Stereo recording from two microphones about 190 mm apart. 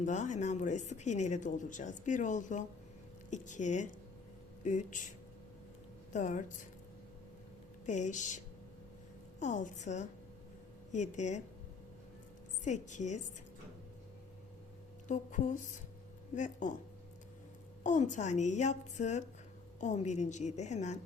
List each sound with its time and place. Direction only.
0.0 s speech: 40° left (ahead or behind)
6.1 s speech: 40° left (ahead or behind)
7.9 s speech: 40° left (ahead or behind)
9.4 s speech: 40° left (ahead or behind)
12.6 s speech: 40° left (ahead or behind)
15.0 s speech: 40° left (ahead or behind)
17.8 s speech: 40° left (ahead or behind)